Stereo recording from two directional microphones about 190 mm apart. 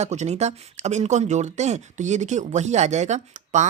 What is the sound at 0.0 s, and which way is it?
Speech, 35° right (ahead or behind).